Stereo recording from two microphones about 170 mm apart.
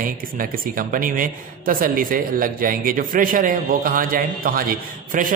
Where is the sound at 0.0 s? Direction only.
55° right (ahead or behind).